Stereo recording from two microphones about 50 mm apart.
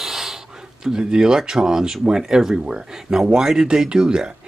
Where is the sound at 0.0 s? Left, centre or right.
Centre.